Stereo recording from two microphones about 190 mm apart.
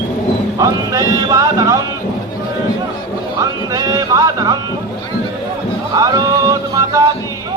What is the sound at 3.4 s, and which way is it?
Music, 20° right (ahead or behind).